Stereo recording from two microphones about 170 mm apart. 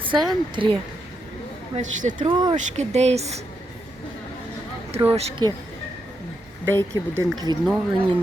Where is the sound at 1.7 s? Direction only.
45° right (ahead or behind).